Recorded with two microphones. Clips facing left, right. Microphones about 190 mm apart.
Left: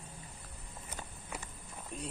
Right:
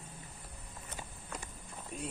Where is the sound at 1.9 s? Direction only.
Centre (ahead or behind).